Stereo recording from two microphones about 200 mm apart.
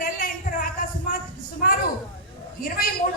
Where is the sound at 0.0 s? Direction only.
45° left (ahead or behind).